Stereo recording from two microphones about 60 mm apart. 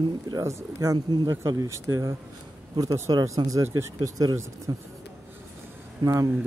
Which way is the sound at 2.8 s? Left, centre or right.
Right.